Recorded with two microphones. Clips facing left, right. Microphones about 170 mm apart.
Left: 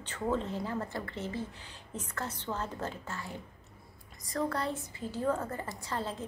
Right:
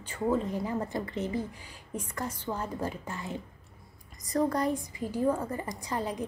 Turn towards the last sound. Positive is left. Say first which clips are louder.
# right 4 dB
turn(degrees=-15)  # may be behind; listen again after turning